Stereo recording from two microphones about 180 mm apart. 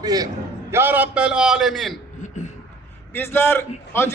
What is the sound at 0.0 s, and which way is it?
A man's voice, 20° right (ahead or behind).